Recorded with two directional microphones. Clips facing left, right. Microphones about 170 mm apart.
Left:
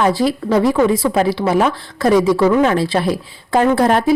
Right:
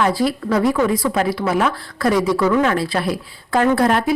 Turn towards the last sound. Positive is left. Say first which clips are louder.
# left 3 dB
turn(degrees=25)  # may be behind; listen again after turning